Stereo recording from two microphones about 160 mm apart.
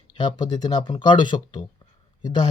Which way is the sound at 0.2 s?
30° left (ahead or behind).